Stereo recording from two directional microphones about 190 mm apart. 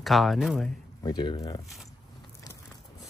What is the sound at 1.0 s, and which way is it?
Speech, 25° left (ahead or behind).